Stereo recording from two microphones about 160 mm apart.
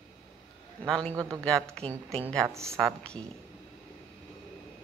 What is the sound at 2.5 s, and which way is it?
Speech, 20° right (ahead or behind).